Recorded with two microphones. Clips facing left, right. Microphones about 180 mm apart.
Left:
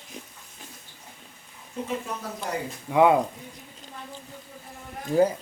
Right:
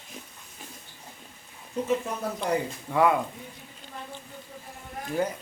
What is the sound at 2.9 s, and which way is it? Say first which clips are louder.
Speech: left 4 dB; 20° left (ahead or behind).